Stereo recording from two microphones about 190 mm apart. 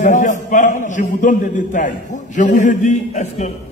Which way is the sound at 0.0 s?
40° left (ahead or behind).